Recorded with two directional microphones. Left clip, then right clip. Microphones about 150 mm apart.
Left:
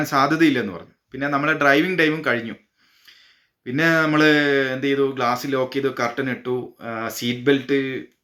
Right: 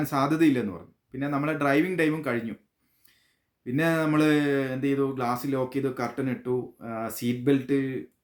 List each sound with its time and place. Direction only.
0.0 s speech: 45° right (ahead or behind)
3.6 s speech: 45° right (ahead or behind)